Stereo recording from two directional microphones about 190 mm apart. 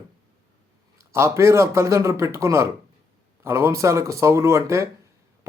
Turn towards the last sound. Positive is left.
turn(degrees=-15)  # may be behind; listen again after turning